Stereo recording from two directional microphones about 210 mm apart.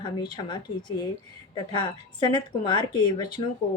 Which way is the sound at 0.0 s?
20° left (ahead or behind).